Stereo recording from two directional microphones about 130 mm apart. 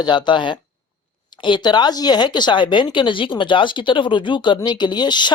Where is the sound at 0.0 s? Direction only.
35° left (ahead or behind).